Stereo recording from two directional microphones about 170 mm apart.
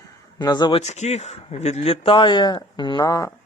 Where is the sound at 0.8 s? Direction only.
40° left (ahead or behind); by 3.3 s 20° left (ahead or behind).